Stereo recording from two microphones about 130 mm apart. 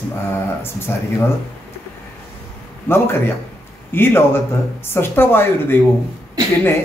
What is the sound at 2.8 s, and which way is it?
A man's voice, 20° left (ahead or behind).